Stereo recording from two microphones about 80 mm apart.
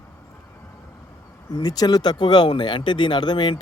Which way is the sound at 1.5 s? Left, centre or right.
Left.